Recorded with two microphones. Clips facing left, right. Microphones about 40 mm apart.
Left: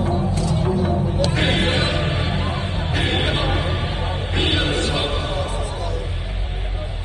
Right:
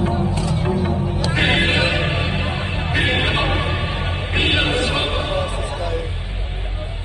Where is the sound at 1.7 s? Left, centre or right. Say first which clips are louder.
Right 2 dB; right.